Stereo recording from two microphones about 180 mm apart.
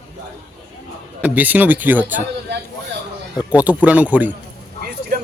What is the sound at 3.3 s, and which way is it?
Speech, 10° right (ahead or behind).